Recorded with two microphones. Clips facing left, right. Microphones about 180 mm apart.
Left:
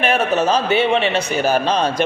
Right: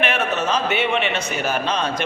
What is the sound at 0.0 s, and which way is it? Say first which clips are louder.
A man's voice: left 5 dB; 35° left (ahead or behind).